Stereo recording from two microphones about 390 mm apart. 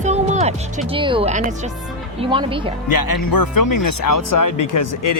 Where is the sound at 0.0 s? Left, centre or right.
Centre.